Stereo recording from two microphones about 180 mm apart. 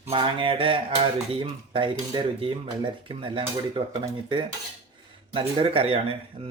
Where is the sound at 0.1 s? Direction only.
30° right (ahead or behind).